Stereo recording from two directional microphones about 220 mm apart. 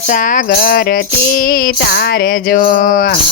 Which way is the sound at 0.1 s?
35° left (ahead or behind).